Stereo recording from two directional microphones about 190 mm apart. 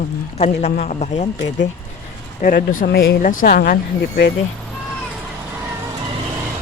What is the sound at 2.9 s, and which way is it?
Speech, 55° left (ahead or behind).